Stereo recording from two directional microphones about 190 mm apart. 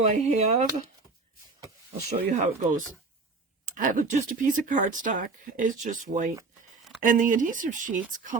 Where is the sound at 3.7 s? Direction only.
45° right (ahead or behind).